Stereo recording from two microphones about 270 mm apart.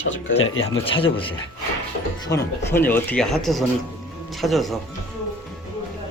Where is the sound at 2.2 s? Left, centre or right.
Centre.